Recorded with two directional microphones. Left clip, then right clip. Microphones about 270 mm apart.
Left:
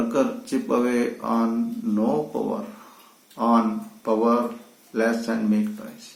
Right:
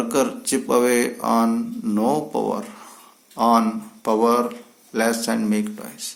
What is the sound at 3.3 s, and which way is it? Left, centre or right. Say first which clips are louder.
Speech: right 4 dB; right.